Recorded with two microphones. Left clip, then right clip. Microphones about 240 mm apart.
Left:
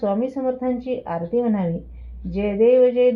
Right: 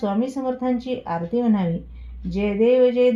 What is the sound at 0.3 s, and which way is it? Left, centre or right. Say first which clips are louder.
Speech: left 1 dB; right.